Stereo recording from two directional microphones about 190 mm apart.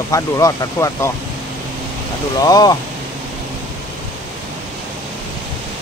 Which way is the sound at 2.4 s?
20° left (ahead or behind).